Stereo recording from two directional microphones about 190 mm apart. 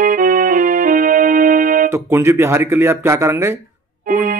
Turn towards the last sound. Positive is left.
turn(degrees=-45)  # may be behind; listen again after turning